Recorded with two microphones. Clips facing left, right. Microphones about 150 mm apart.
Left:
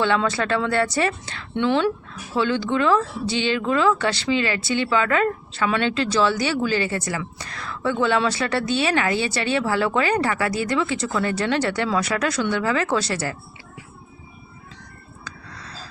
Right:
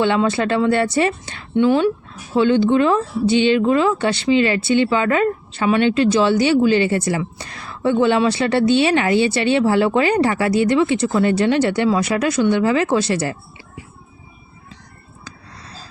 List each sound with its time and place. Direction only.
0.0 s speech: 20° right (ahead or behind)